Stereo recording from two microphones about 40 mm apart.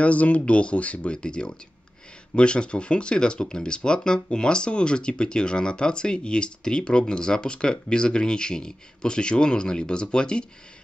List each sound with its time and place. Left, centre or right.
0.0 s speech: left
1.1 s speech: left